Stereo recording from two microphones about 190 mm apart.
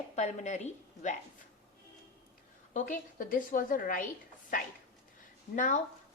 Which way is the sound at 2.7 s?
45° left (ahead or behind).